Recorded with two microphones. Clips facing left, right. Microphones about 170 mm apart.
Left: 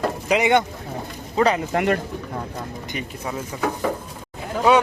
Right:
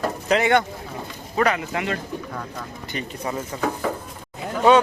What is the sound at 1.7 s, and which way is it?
Speech, 55° left (ahead or behind).